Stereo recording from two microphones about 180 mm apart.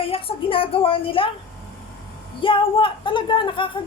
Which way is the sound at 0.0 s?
30° left (ahead or behind).